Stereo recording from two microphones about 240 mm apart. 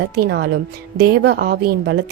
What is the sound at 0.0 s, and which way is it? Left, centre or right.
A woman's voice, right.